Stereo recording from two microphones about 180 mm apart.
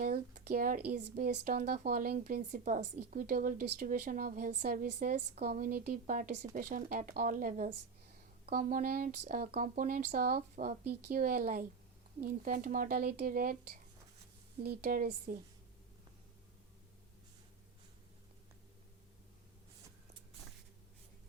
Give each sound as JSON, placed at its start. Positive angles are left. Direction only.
{"t": 0.0, "sound": "speech", "side_deg": -55}